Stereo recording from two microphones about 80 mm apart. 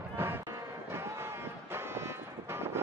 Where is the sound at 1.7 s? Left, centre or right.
Right.